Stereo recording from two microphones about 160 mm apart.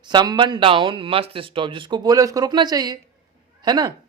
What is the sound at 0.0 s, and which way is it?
Speech, 25° right (ahead or behind).